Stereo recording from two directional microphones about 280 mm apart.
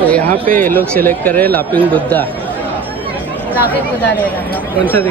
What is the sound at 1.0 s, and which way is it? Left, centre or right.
Speech, centre.